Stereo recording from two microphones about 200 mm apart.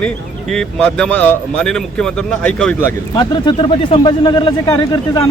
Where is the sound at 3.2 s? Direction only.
25° left (ahead or behind).